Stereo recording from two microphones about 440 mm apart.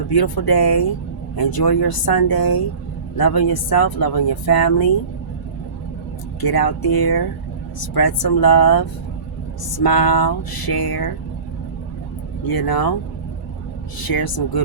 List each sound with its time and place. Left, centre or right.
0.1 s speech: left
6.4 s speech: left
12.5 s speech: left
14.0 s speech: left